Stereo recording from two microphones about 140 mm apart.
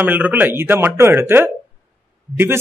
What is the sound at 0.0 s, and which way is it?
A man's voice, 10° right (ahead or behind).